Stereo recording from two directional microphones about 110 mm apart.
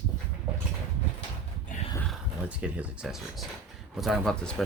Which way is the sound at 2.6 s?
10° right (ahead or behind).